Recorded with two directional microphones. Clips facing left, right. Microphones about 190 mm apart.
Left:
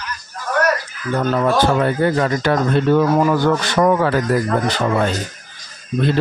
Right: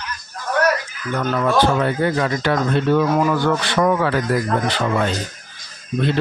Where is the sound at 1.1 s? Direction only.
30° left (ahead or behind).